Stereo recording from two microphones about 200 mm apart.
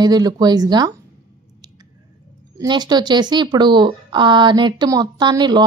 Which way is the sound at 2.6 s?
20° right (ahead or behind).